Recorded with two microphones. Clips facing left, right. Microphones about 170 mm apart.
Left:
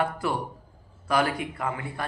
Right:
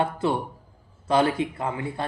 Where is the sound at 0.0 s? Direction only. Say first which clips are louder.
Right 3 dB; 25° right (ahead or behind).